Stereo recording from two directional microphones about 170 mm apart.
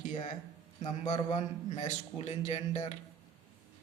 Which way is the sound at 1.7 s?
40° left (ahead or behind).